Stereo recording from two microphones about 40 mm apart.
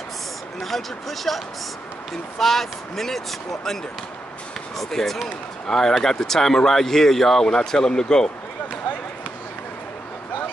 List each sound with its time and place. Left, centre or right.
0.6 s speech: centre
4.7 s speech: centre